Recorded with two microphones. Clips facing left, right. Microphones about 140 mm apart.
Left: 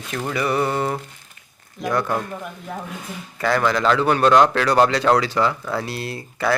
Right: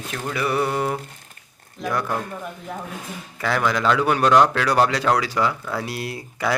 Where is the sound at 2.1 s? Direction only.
5° left (ahead or behind).